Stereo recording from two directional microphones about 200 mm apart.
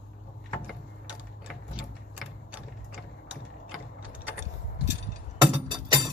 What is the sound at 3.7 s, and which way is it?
Gears, 5° right (ahead or behind).